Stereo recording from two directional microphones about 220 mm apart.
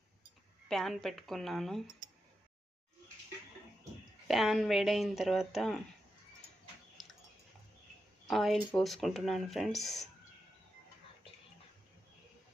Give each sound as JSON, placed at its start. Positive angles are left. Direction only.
{"t": 0.7, "sound": "speech", "side_deg": 0}
{"t": 4.3, "sound": "speech", "side_deg": 0}
{"t": 6.9, "sound": "a sound", "side_deg": 0}
{"t": 8.3, "sound": "speech", "side_deg": 0}